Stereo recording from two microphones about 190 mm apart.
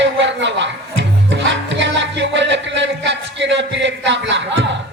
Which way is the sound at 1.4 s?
70° right (ahead or behind).